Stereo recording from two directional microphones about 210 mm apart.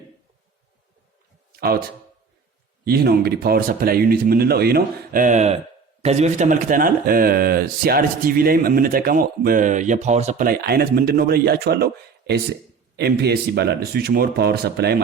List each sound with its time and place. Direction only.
1.5 s a man's voice: 50° right (ahead or behind)
2.8 s speech: 50° right (ahead or behind)